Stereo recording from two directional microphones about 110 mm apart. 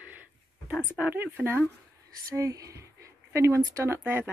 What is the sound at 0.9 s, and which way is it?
Speech, 15° right (ahead or behind).